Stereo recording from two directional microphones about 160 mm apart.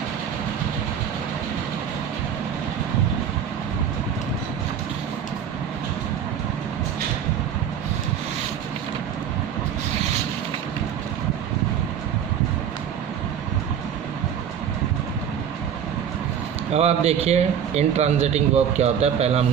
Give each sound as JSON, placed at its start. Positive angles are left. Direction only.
{"t": 16.7, "sound": "speech", "side_deg": -40}